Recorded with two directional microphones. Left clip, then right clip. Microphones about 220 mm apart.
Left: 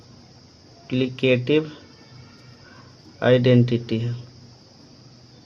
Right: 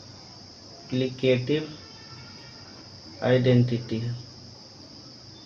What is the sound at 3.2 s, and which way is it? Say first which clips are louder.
Speech: left 5 dB; 30° left (ahead or behind).